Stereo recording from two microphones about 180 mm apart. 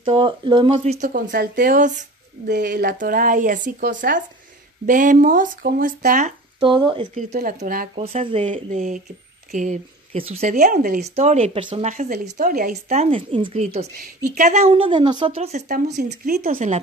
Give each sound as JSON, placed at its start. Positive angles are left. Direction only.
{"t": 0.0, "sound": "speech", "side_deg": -25}
{"t": 1.5, "sound": "speech", "side_deg": -50}
{"t": 2.5, "sound": "speech", "side_deg": -65}
{"t": 6.6, "sound": "speech", "side_deg": -25}
{"t": 7.2, "sound": "speech", "side_deg": -45}
{"t": 7.9, "sound": "speech", "side_deg": -35}
{"t": 11.1, "sound": "speech", "side_deg": -35}
{"t": 15.7, "sound": "speech", "side_deg": -65}